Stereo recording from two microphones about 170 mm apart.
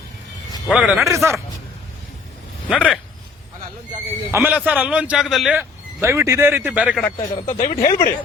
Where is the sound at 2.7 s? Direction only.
5° right (ahead or behind).